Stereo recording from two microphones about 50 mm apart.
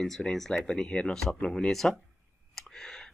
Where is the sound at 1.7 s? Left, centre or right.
Centre.